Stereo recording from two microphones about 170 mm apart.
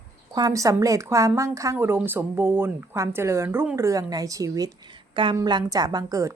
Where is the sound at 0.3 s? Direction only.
20° right (ahead or behind).